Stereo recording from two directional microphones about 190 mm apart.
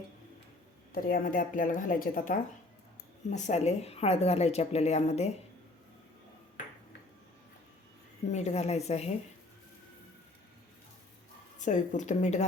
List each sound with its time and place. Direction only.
0.9 s a woman's voice: 50° left (ahead or behind)
8.3 s speech: 35° left (ahead or behind)
11.6 s speech: 40° left (ahead or behind)